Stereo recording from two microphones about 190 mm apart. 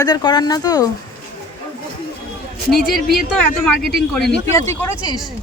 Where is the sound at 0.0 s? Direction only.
20° left (ahead or behind).